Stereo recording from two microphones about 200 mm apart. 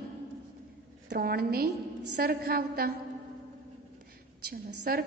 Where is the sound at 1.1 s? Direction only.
50° right (ahead or behind).